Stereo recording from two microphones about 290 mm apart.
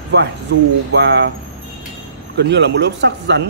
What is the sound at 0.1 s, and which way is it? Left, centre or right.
A man's voice, right.